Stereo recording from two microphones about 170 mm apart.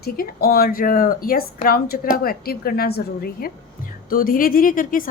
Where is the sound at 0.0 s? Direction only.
60° left (ahead or behind).